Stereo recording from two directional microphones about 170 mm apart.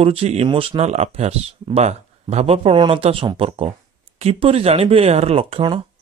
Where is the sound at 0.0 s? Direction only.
35° right (ahead or behind).